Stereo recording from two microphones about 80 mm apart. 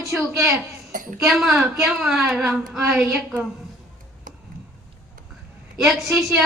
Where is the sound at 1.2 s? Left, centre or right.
Centre.